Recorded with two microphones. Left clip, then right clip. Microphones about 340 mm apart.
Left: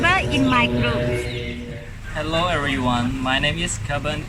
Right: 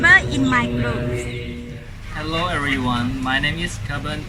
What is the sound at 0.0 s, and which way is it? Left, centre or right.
Vehicle, centre.